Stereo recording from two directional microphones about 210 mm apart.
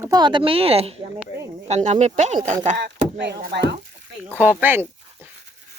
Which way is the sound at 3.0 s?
50° right (ahead or behind).